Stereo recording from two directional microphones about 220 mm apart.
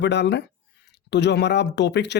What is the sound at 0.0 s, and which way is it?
Speech, 50° left (ahead or behind).